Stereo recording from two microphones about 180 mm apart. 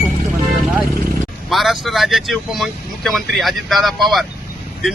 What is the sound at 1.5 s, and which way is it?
Speech, centre (ahead or behind).